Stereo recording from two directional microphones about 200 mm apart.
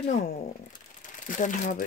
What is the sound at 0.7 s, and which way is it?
Crumpling, 40° left (ahead or behind).